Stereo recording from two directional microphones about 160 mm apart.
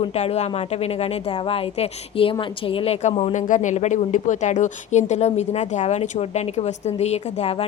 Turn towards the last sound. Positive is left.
turn(degrees=40)  # may be behind; listen again after turning